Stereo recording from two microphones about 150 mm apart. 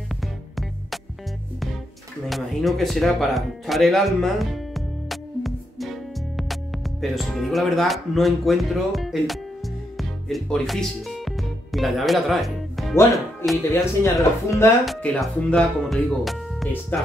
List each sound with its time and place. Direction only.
0.1 s music: centre (ahead or behind)
2.2 s speech: centre (ahead or behind)
9.9 s music: centre (ahead or behind)
13.7 s speech: 20° left (ahead or behind)
14.9 s speech: 5° left (ahead or behind)